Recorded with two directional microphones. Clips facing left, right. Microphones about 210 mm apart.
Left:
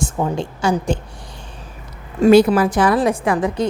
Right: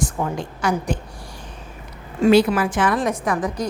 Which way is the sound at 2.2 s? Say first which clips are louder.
Left 4 dB; 40° left (ahead or behind).